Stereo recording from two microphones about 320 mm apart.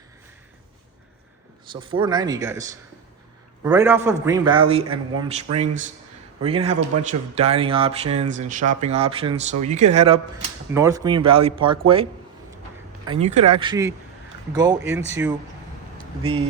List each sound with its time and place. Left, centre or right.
1.7 s a man's voice: centre
13.1 s a man's voice: centre